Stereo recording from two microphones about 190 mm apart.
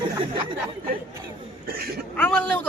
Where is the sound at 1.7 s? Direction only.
50° right (ahead or behind).